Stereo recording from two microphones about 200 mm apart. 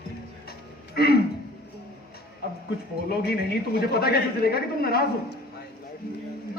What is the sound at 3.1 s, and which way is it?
Speech, 50° left (ahead or behind).